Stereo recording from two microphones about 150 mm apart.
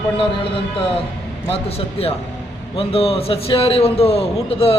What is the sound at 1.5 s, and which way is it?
A man's voice, 40° left (ahead or behind).